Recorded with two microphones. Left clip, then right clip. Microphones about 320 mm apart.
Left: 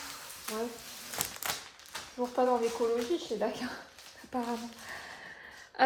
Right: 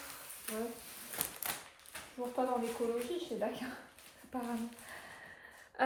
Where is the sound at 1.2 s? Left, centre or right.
Left.